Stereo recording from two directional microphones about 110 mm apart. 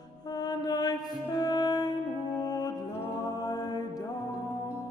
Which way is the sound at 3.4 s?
35° left (ahead or behind).